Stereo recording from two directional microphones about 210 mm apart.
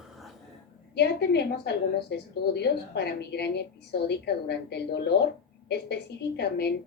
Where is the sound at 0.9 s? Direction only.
50° left (ahead or behind).